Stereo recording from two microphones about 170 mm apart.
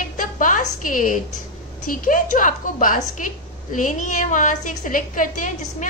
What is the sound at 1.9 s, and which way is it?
A woman's voice, 50° left (ahead or behind).